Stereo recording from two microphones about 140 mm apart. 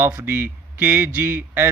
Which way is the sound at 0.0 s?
15° right (ahead or behind).